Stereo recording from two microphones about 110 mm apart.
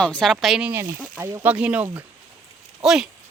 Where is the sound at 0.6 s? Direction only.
20° right (ahead or behind).